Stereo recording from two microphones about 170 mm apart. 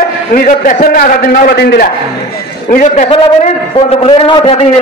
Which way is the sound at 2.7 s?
50° left (ahead or behind).